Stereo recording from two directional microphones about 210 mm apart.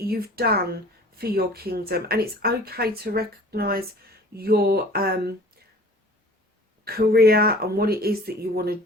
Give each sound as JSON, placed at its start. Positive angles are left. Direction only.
{"t": 0.0, "sound": "speech", "side_deg": -45}
{"t": 6.8, "sound": "speech", "side_deg": -45}